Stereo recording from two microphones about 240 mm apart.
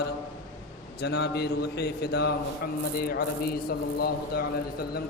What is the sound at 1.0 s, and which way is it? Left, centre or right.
A man's voice, left.